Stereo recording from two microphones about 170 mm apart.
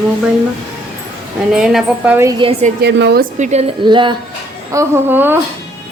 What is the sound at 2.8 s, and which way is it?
Speech, 90° right.